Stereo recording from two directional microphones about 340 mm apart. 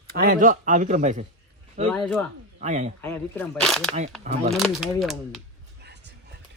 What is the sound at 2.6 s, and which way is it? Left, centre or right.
Speech, centre.